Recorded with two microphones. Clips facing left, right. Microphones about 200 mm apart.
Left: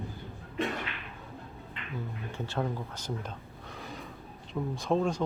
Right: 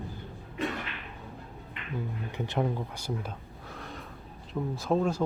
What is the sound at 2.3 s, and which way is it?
Speech, 15° right (ahead or behind).